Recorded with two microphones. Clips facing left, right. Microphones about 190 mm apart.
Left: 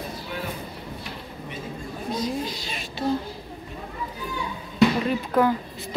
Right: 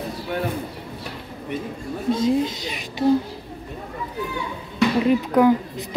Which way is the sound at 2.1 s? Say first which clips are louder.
Right 7 dB; 25° right (ahead or behind).